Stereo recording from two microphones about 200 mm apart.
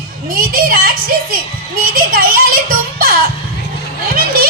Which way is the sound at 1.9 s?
45° right (ahead or behind).